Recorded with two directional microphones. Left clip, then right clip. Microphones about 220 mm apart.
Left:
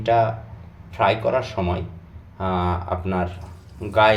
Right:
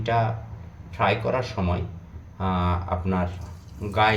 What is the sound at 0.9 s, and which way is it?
Speech, 30° left (ahead or behind).